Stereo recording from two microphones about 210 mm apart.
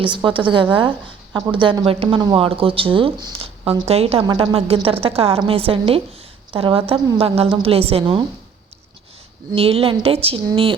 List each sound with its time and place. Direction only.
0.0 s speech: 20° right (ahead or behind)
9.6 s speech: 25° right (ahead or behind)